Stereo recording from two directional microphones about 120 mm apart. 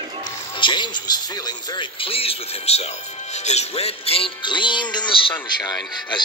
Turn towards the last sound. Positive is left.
turn(degrees=35)  # may be behind; listen again after turning